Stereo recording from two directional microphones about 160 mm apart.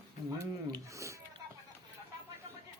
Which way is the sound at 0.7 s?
20° right (ahead or behind).